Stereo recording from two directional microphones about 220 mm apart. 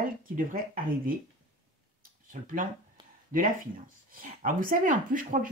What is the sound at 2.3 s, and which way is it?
Speech, 35° right (ahead or behind).